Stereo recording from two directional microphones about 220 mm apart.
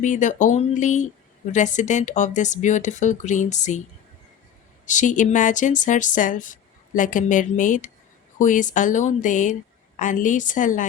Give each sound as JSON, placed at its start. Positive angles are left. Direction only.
{"t": 0.0, "sound": "speech", "side_deg": 35}
{"t": 4.9, "sound": "speech", "side_deg": 35}